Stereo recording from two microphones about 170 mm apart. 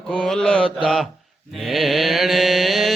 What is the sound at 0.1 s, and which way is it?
Mantra, 5° left (ahead or behind).